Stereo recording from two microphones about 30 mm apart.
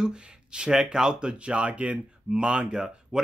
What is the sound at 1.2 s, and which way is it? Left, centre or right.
Speech, right.